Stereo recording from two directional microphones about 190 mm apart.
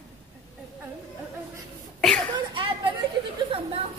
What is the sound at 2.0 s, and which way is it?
Speech, 5° left (ahead or behind).